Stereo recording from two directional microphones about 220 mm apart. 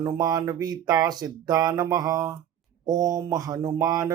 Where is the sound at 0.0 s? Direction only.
20° right (ahead or behind).